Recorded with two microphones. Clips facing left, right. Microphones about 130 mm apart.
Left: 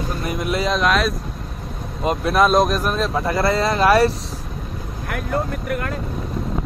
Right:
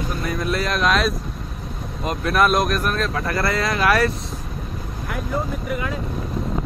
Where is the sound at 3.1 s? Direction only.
25° left (ahead or behind).